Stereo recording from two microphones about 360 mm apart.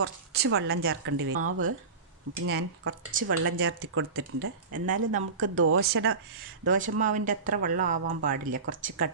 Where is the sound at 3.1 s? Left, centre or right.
Right.